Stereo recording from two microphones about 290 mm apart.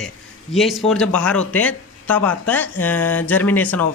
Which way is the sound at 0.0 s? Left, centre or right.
Centre.